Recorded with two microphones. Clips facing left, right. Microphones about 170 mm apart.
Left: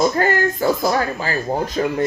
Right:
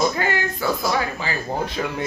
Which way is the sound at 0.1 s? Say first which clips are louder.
Left 6 dB; 45° left (ahead or behind).